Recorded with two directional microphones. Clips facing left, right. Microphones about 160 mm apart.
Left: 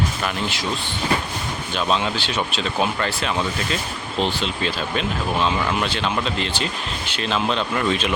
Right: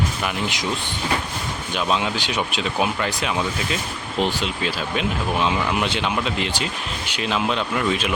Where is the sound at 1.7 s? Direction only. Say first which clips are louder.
Left 1 dB; 10° right (ahead or behind).